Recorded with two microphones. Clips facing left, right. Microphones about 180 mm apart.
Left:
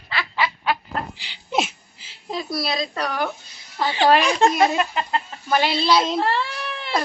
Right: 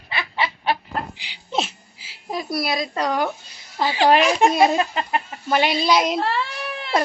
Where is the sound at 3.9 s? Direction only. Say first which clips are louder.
Right 1 dB; 10° right (ahead or behind).